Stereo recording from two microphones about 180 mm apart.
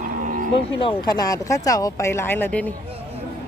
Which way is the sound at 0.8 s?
25° left (ahead or behind).